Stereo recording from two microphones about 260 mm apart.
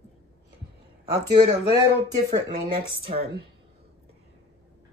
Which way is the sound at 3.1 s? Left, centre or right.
Right.